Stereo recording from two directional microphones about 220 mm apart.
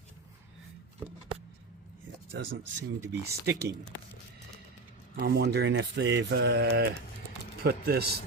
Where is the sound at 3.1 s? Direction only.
50° right (ahead or behind).